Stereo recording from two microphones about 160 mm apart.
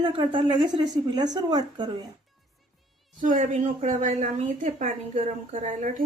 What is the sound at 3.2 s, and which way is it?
A woman's voice, 55° right (ahead or behind).